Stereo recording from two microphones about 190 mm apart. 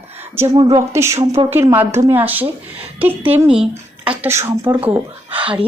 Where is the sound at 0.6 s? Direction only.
30° right (ahead or behind).